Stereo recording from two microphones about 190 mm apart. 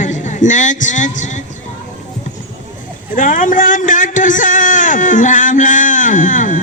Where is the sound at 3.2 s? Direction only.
45° left (ahead or behind).